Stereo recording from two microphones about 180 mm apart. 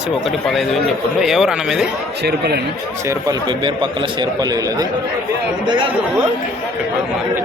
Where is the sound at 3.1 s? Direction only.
20° right (ahead or behind).